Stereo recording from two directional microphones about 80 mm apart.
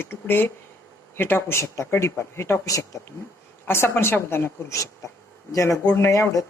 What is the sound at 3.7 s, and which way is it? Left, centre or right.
Speech, left.